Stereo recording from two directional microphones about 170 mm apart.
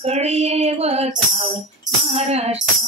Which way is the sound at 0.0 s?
40° right (ahead or behind).